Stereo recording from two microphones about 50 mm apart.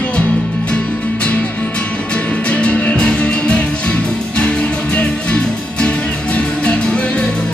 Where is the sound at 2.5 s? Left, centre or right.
Left.